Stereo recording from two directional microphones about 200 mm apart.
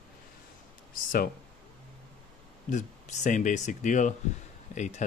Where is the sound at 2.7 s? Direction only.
35° left (ahead or behind).